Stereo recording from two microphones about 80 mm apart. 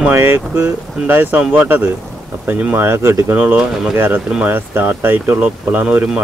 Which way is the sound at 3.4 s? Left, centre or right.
Right.